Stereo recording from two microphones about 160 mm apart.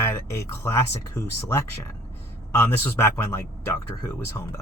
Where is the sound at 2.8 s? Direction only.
15° left (ahead or behind).